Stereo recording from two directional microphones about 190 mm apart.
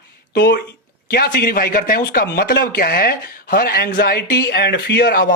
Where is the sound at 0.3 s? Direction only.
60° left (ahead or behind).